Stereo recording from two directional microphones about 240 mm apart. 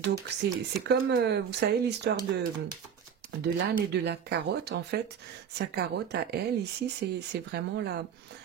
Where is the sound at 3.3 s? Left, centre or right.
Right.